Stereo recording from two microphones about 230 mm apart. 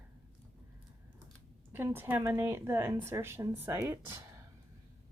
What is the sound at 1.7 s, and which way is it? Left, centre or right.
A woman's voice, centre.